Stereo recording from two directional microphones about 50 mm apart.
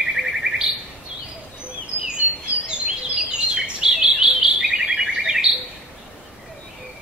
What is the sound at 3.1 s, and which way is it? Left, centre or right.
Bird, centre.